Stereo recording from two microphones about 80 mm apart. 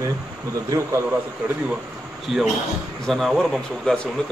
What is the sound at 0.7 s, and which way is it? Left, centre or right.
Speech, right.